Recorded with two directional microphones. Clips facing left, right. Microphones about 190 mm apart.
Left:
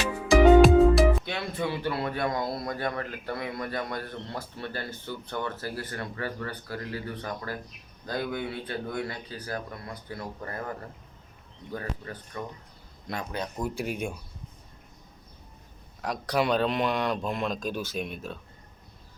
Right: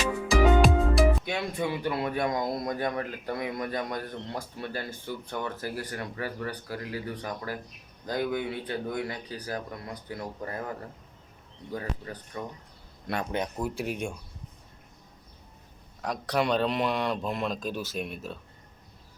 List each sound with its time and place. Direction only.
0.3 s music: centre (ahead or behind)
1.2 s a man's voice: 15° right (ahead or behind)
13.1 s speech: 60° right (ahead or behind)
13.6 s a man's voice: centre (ahead or behind)
16.0 s a man's voice: centre (ahead or behind)